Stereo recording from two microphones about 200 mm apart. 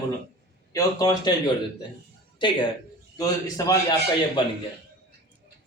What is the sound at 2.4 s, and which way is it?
A man's voice, 25° left (ahead or behind).